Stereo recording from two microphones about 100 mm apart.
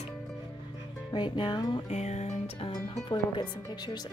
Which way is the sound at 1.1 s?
55° left (ahead or behind).